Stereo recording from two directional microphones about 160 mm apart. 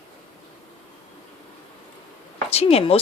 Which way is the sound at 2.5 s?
40° left (ahead or behind).